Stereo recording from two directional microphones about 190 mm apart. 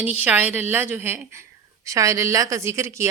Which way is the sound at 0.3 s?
10° right (ahead or behind).